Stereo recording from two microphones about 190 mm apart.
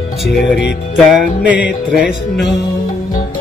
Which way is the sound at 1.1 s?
5° right (ahead or behind).